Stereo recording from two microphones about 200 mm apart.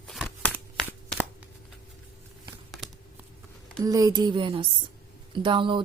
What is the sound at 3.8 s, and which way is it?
A woman's voice, 20° right (ahead or behind).